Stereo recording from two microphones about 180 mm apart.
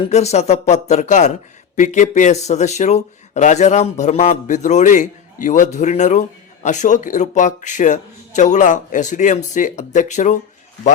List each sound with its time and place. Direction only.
0.1 s speech: 35° left (ahead or behind)